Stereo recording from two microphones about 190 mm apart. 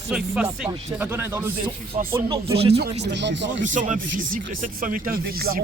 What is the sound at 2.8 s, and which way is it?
Speech, 60° right (ahead or behind).